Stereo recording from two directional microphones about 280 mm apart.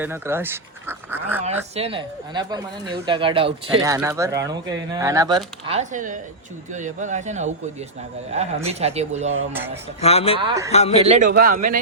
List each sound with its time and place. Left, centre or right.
0.0 s speech: centre
1.7 s speech: centre
5.6 s speech: right
10.0 s speech: left
10.4 s speech: centre
10.7 s speech: left
11.0 s speech: right